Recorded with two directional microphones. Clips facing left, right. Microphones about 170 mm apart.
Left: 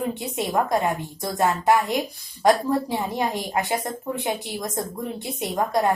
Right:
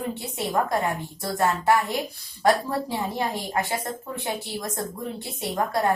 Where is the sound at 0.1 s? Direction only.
15° left (ahead or behind).